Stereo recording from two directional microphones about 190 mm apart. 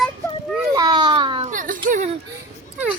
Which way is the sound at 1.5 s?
45° right (ahead or behind).